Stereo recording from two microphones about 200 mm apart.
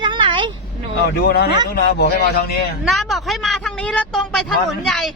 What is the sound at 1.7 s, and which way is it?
Speech, 55° left (ahead or behind).